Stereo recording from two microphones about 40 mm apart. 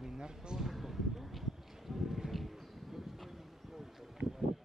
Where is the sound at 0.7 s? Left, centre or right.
Centre.